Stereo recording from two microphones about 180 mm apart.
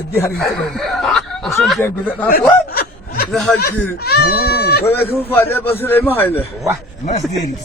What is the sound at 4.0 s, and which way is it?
Goat, 60° left (ahead or behind).